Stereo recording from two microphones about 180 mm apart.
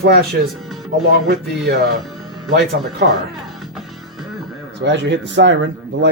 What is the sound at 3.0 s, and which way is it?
Speech, 70° right (ahead or behind).